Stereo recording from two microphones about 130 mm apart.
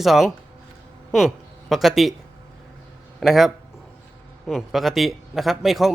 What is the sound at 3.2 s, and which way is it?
A man's voice, centre (ahead or behind).